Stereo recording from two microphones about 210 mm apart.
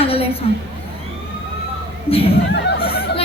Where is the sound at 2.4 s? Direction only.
50° left (ahead or behind).